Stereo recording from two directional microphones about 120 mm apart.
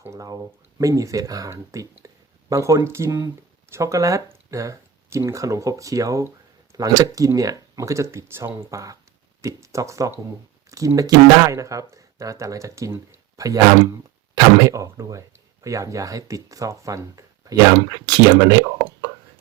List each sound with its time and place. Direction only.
0.0 s speech: 25° right (ahead or behind)